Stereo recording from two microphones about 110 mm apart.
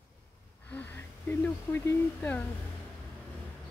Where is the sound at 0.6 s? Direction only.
15° left (ahead or behind).